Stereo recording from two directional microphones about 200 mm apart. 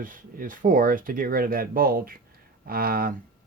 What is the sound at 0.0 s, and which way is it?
Speech, 45° right (ahead or behind).